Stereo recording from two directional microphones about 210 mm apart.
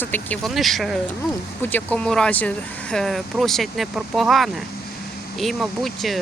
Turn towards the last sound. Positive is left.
turn(degrees=0)  # may be behind; listen again after turning